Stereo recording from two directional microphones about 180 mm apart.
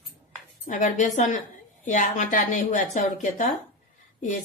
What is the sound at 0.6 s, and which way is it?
A woman's voice, 45° left (ahead or behind).